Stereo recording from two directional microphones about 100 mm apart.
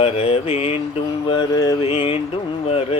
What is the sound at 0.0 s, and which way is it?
Mantra, 90° left.